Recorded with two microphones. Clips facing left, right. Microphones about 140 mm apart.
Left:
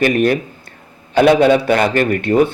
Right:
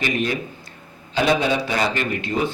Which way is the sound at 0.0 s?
55° left (ahead or behind).